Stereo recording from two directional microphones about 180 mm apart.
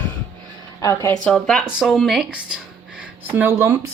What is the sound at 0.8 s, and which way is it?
Speech, 15° left (ahead or behind).